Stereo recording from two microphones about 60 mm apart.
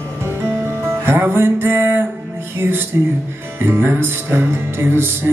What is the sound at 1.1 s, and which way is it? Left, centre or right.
Music, right.